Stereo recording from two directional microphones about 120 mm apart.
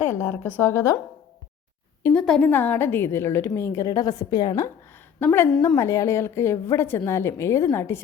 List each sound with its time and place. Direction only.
0.1 s a woman's voice: 15° left (ahead or behind)
2.1 s a woman's voice: 5° left (ahead or behind); by 4.7 s 30° left (ahead or behind)
5.2 s a woman's voice: 20° left (ahead or behind)